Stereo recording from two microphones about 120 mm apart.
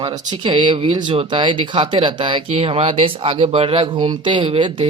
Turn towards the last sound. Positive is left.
turn(degrees=-40)  # may be behind; listen again after turning